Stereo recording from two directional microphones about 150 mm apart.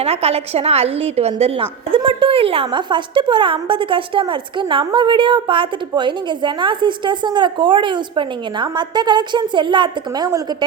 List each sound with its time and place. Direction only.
0.0 s a woman's voice: 40° right (ahead or behind); by 10.7 s 25° right (ahead or behind)